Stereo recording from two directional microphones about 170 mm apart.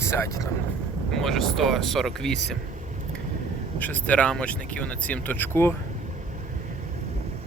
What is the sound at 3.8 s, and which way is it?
Speech, 10° left (ahead or behind).